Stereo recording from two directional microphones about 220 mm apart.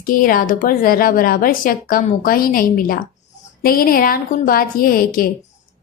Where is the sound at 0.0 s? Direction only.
40° left (ahead or behind).